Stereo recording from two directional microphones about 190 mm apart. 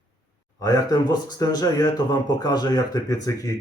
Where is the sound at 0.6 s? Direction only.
20° left (ahead or behind).